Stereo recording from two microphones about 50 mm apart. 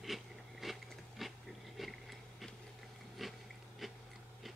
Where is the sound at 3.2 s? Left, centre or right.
Centre.